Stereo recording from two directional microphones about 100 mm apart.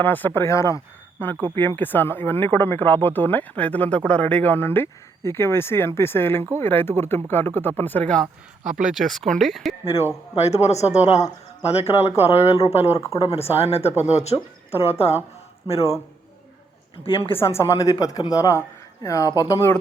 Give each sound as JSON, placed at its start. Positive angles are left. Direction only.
{"t": 0.0, "sound": "speech", "side_deg": 20}
{"t": 8.2, "sound": "speech", "side_deg": -5}
{"t": 10.3, "sound": "speech", "side_deg": 90}
{"t": 12.7, "sound": "speech", "side_deg": 90}
{"t": 17.0, "sound": "a woman's voice", "side_deg": 65}
{"t": 17.3, "sound": "a woman's voice", "side_deg": 25}